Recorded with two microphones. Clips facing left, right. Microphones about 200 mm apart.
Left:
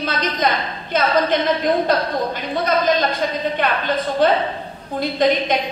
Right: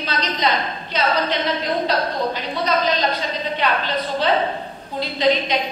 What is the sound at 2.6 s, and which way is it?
A woman's voice, 50° left (ahead or behind).